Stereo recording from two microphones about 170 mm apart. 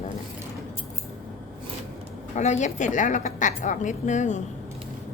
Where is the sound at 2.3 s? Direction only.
45° left (ahead or behind).